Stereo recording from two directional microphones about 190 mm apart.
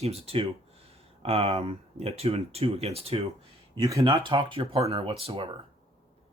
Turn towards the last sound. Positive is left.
turn(degrees=-25)  # may be behind; listen again after turning